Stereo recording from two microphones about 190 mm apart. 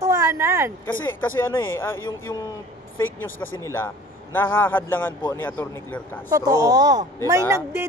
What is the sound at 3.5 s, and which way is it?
A man's voice, 15° left (ahead or behind).